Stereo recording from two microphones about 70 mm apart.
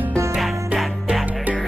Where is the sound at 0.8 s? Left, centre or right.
Centre.